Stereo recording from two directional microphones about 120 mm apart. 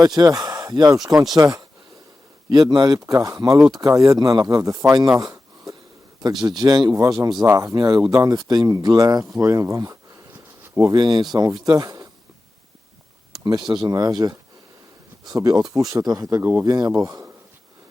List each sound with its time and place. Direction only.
0.0 s speech: 30° right (ahead or behind)
10.6 s a sound: 25° right (ahead or behind)
10.9 s speech: 35° right (ahead or behind)
13.4 s speech: 35° right (ahead or behind)
16.4 s speech: 20° right (ahead or behind)
16.6 s speech: 35° right (ahead or behind)